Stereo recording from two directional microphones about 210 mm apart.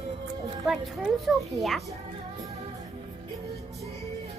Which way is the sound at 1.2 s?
Centre (ahead or behind).